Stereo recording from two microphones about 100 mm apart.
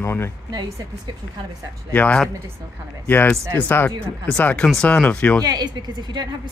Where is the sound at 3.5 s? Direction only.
20° left (ahead or behind).